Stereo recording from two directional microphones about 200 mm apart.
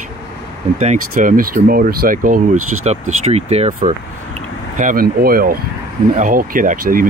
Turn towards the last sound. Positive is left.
turn(degrees=-45)  # may be behind; listen again after turning